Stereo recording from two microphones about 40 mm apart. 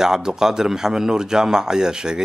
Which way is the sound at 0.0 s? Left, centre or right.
Centre.